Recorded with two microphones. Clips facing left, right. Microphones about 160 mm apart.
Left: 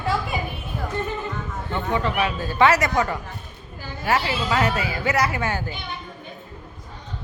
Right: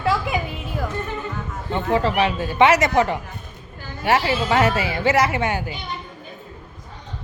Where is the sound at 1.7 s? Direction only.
30° right (ahead or behind).